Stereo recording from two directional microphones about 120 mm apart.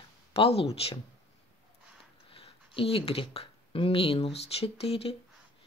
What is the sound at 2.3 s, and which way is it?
Speech, 50° left (ahead or behind).